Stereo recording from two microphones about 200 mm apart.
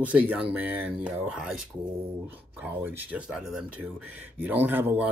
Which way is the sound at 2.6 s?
10° right (ahead or behind).